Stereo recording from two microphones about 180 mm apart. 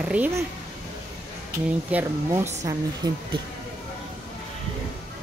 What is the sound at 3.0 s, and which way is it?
Speech, 25° right (ahead or behind).